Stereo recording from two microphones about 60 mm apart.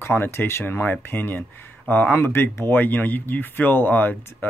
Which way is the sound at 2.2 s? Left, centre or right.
Left.